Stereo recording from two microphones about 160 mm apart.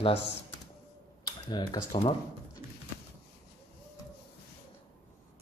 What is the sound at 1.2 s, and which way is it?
Speech, 25° left (ahead or behind).